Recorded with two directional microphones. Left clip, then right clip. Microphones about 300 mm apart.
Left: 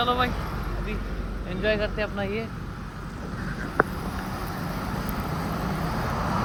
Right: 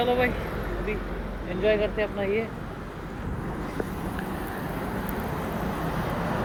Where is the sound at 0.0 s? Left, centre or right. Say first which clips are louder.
Even; centre.